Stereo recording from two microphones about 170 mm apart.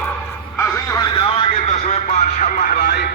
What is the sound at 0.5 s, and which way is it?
Music, 15° left (ahead or behind).